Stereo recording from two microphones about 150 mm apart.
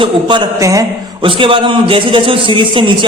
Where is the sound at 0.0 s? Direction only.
30° right (ahead or behind).